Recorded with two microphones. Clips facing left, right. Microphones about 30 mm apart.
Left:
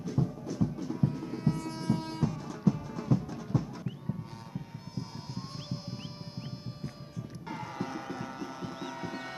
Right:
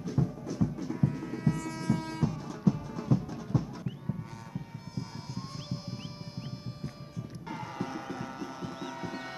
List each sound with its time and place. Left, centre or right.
0.2 s music: centre
0.7 s music: right
1.2 s a sound: left
2.2 s music: centre
7.4 s music: centre
9.1 s music: centre